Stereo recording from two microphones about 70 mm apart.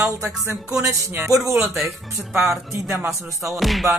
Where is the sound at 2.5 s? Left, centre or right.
Right.